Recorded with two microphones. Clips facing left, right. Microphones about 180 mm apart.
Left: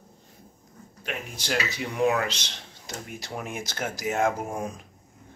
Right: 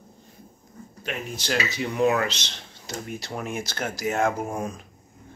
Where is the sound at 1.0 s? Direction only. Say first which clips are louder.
Right 3 dB; 10° left (ahead or behind).